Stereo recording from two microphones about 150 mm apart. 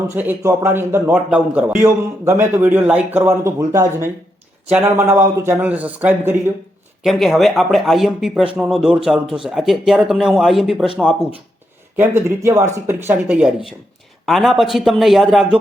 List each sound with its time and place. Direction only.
0.1 s a man's voice: 15° right (ahead or behind)
7.0 s speech: centre (ahead or behind)
11.9 s a man's voice: 15° right (ahead or behind)